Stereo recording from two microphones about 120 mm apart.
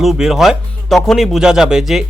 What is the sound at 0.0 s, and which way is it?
Speech, 5° right (ahead or behind).